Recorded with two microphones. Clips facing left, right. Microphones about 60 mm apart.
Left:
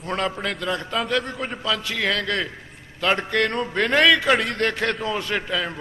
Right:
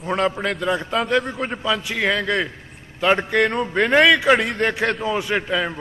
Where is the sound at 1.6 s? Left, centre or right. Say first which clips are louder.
Right 3 dB; centre.